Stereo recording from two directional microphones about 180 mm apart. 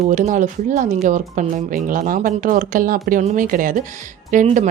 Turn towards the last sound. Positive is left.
turn(degrees=-45)  # may be behind; listen again after turning